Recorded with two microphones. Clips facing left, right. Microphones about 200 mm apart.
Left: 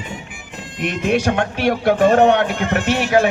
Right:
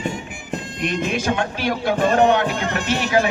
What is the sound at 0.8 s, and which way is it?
Speech, 65° left (ahead or behind).